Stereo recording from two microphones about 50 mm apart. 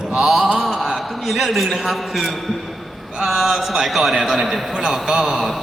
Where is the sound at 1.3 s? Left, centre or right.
Centre.